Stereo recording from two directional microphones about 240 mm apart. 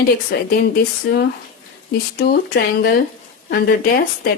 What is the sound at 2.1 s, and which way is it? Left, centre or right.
A woman's voice, left.